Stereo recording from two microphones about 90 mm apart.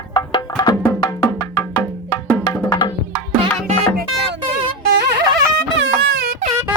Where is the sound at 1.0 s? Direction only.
50° left (ahead or behind).